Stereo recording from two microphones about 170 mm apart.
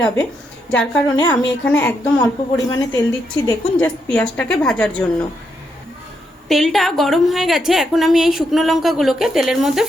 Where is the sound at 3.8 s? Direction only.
5° left (ahead or behind).